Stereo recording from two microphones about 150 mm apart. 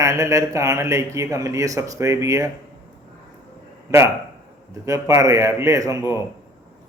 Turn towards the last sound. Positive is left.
turn(degrees=-20)  # may be behind; listen again after turning